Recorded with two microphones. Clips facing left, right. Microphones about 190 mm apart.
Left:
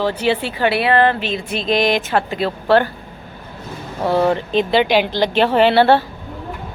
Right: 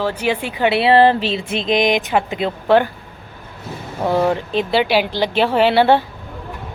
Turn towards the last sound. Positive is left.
turn(degrees=-15)  # may be behind; listen again after turning